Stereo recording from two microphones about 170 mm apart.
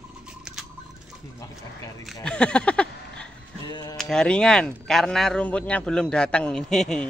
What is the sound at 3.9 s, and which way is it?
Speech, 5° left (ahead or behind).